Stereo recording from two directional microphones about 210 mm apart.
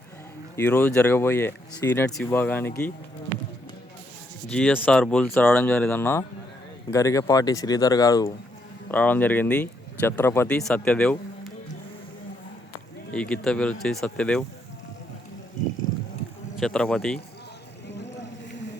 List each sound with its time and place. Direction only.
0.5 s speech: 10° left (ahead or behind)
4.4 s speech: 5° left (ahead or behind)
13.1 s speech: 5° left (ahead or behind)
16.6 s speech: 5° left (ahead or behind)
17.8 s a sound: 55° left (ahead or behind)